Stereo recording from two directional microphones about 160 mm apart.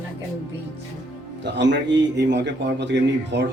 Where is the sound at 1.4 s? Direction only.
90° right.